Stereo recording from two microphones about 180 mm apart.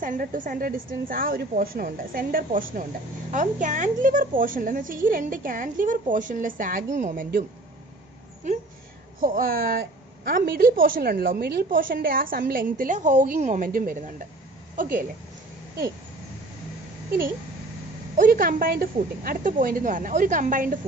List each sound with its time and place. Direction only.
0.0 s a woman's voice: 50° right (ahead or behind)
9.2 s a woman's voice: 55° right (ahead or behind)
18.1 s a woman's voice: 50° right (ahead or behind)